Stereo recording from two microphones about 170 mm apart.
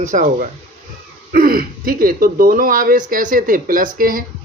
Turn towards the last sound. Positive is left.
turn(degrees=-55)  # may be behind; listen again after turning